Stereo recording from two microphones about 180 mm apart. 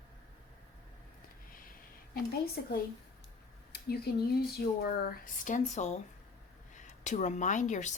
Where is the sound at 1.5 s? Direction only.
50° left (ahead or behind).